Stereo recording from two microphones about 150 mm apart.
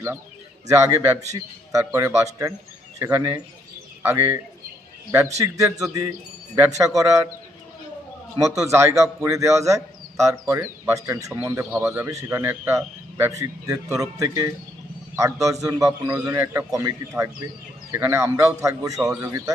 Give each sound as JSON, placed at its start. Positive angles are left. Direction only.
{"t": 0.7, "sound": "a man's voice", "side_deg": -20}
{"t": 5.4, "sound": "a man's voice", "side_deg": -20}
{"t": 6.7, "sound": "a man's voice", "side_deg": -20}
{"t": 8.4, "sound": "a man's voice", "side_deg": -20}